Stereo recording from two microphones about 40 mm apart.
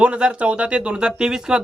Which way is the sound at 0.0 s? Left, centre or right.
Right.